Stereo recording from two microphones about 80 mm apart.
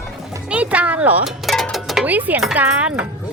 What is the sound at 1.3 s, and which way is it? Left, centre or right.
Speech, centre.